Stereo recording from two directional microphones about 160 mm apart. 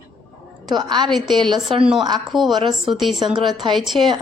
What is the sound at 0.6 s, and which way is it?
Speech, 25° right (ahead or behind).